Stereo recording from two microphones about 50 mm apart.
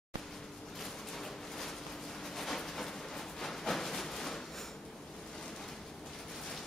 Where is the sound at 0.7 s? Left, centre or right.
Centre.